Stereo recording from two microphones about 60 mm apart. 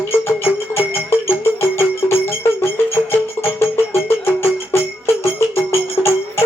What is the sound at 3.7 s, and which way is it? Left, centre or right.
Music, left.